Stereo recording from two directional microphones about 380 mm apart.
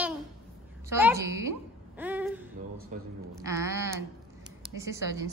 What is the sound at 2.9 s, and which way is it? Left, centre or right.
Speech, centre.